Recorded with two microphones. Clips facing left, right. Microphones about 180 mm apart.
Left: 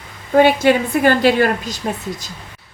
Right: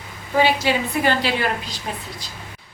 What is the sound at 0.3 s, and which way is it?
A woman's voice, 55° left (ahead or behind).